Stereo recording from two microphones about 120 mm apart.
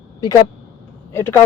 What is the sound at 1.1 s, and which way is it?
Speech, 20° left (ahead or behind).